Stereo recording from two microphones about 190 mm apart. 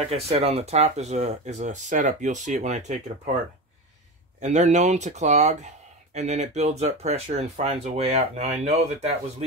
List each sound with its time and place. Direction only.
0.1 s speech: 30° right (ahead or behind)
4.4 s speech: 40° right (ahead or behind)